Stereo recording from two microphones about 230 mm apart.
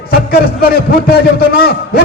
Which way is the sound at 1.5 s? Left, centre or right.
Left.